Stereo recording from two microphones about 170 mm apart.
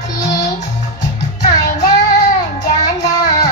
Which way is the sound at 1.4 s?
45° left (ahead or behind).